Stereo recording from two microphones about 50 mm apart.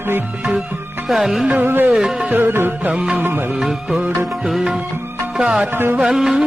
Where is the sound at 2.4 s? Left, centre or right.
Right.